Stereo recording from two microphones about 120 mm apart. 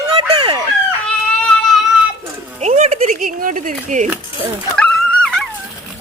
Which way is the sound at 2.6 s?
70° right (ahead or behind).